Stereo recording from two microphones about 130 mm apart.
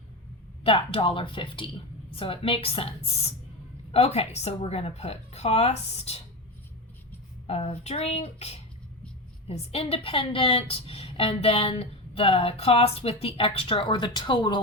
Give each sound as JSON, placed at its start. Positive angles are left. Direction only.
{"t": 0.6, "sound": "a woman's voice", "side_deg": 45}
{"t": 7.4, "sound": "a woman's voice", "side_deg": 50}